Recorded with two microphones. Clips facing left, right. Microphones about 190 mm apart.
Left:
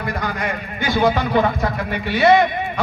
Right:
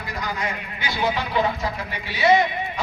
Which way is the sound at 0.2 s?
55° left (ahead or behind).